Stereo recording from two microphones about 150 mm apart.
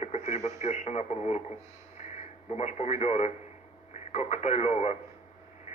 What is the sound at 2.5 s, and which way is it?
Speech, 50° left (ahead or behind).